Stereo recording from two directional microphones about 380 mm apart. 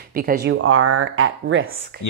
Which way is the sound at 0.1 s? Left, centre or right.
Right.